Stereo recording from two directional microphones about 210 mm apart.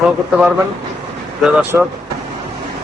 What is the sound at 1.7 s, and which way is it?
Speech, 5° right (ahead or behind).